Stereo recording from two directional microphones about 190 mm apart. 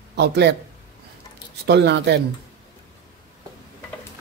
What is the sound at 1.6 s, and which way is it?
Speech, 65° right (ahead or behind).